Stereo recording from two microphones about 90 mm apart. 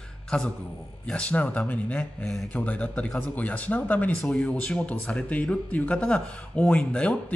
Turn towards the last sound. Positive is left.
turn(degrees=10)  # may be behind; listen again after turning